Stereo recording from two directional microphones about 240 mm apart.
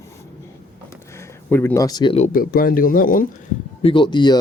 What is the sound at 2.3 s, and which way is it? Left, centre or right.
Speech, left.